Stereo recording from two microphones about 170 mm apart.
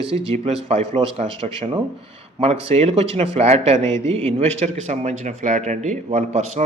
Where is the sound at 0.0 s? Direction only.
35° right (ahead or behind).